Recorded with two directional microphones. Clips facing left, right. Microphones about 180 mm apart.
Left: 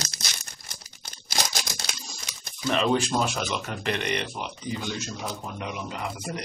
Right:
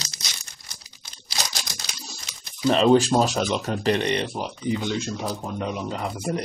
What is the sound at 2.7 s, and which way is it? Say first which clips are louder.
Speech: right 6 dB; 35° right (ahead or behind).